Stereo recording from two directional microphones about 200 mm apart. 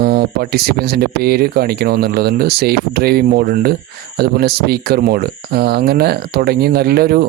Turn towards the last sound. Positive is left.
turn(degrees=-50)  # may be behind; listen again after turning